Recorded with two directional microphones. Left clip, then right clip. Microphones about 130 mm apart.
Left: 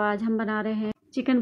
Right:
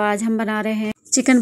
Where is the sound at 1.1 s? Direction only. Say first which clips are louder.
Right 10 dB; 50° right (ahead or behind).